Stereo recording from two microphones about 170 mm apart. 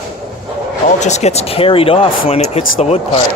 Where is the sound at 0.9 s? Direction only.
40° left (ahead or behind).